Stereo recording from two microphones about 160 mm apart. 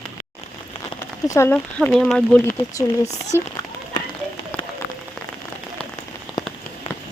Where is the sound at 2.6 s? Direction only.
20° left (ahead or behind).